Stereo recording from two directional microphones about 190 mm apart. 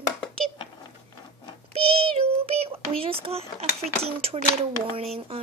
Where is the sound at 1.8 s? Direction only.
30° right (ahead or behind).